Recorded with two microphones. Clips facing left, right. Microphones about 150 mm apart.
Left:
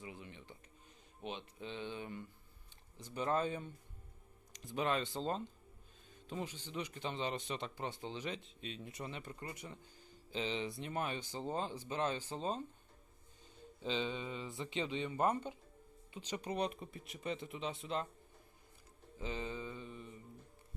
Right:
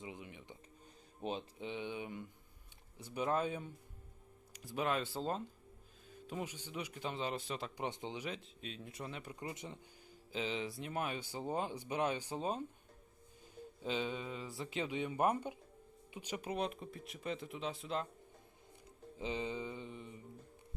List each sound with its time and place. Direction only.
0.0 s speech: 15° right (ahead or behind)
1.2 s speech: 35° right (ahead or behind)
1.5 s speech: 15° right (ahead or behind)
7.8 s speech: 20° right (ahead or behind); by 9.2 s centre (ahead or behind)
9.2 s mantra: 15° right (ahead or behind)
10.3 s speech: 5° right (ahead or behind)
13.8 s speech: 10° right (ahead or behind)
19.2 s mantra: 20° right (ahead or behind)